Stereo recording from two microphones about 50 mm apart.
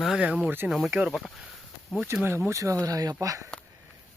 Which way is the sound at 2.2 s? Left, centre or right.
Right.